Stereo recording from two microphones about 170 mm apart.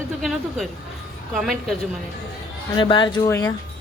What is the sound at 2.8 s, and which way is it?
Speech, 30° left (ahead or behind).